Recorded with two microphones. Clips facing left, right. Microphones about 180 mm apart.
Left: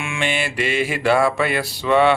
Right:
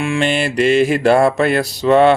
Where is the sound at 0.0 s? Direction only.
40° right (ahead or behind).